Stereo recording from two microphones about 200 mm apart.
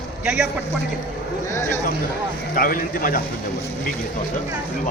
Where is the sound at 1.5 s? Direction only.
10° left (ahead or behind).